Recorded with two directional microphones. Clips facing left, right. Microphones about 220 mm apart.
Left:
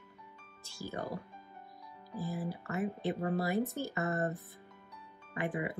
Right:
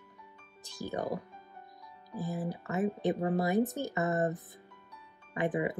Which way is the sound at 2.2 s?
20° right (ahead or behind).